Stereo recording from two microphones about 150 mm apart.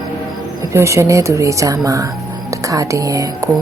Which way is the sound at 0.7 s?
20° right (ahead or behind).